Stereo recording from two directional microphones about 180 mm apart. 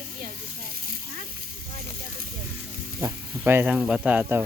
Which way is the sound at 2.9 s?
15° right (ahead or behind).